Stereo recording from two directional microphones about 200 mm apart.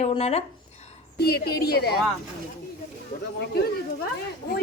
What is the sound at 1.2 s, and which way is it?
Speech, 55° left (ahead or behind).